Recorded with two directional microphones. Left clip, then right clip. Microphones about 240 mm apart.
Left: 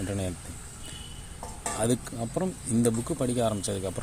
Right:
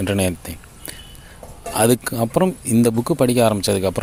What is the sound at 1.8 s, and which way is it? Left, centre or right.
Speech, right.